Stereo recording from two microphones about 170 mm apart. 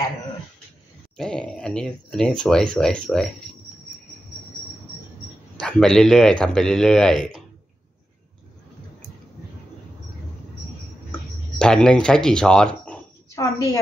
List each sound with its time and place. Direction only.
1.1 s speech: 5° left (ahead or behind)
5.6 s speech: 5° left (ahead or behind)
11.1 s a sound: 5° left (ahead or behind)
13.4 s a woman's voice: 20° left (ahead or behind)